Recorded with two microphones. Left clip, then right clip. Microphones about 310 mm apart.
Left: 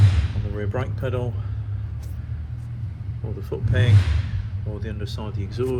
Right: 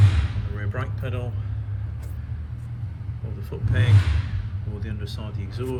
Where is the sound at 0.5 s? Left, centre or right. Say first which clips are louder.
Left 7 dB; left.